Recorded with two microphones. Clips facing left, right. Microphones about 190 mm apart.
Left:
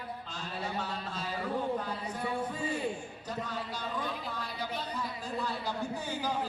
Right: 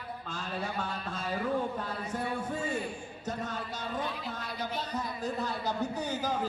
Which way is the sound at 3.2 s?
45° right (ahead or behind).